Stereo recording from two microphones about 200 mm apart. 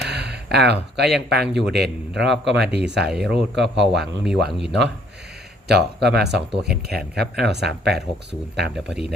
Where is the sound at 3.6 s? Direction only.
60° right (ahead or behind).